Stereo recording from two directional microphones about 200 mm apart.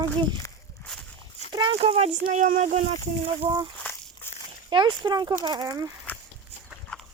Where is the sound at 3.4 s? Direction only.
20° right (ahead or behind).